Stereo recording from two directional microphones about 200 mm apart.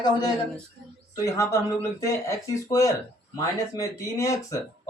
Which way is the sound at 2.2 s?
15° left (ahead or behind).